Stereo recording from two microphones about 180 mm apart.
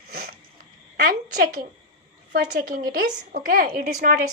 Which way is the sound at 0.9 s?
55° right (ahead or behind).